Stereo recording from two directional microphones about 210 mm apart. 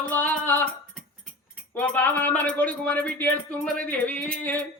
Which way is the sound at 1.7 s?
10° left (ahead or behind).